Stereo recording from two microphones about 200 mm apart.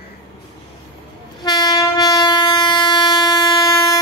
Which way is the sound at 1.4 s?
20° left (ahead or behind).